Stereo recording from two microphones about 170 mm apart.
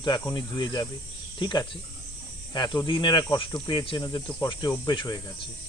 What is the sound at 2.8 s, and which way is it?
Cricket, 30° left (ahead or behind).